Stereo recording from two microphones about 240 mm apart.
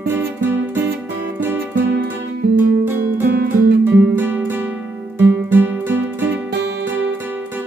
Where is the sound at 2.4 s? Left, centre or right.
Right.